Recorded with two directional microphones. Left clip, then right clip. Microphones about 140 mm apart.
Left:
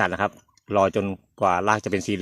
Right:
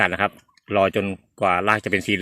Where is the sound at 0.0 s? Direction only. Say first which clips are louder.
Right 3 dB; 15° left (ahead or behind).